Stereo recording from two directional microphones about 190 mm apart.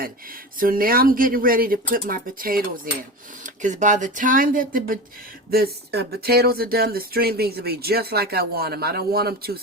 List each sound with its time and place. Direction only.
0.6 s speech: 50° right (ahead or behind)